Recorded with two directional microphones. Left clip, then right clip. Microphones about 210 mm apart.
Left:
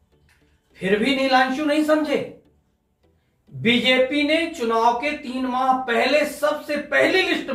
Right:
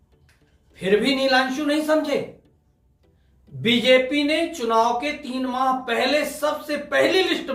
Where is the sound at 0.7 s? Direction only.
15° right (ahead or behind).